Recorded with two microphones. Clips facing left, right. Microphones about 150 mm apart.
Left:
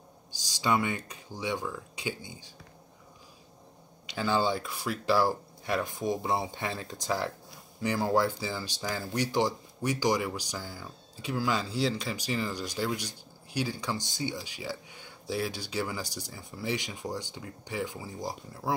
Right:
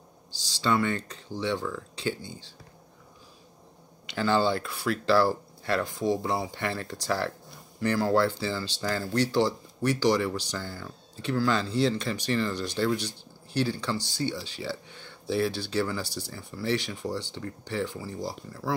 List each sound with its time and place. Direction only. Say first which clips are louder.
0.3 s speech: right 1 dB; 15° left (ahead or behind)
4.1 s speech: right 3 dB; 10° left (ahead or behind)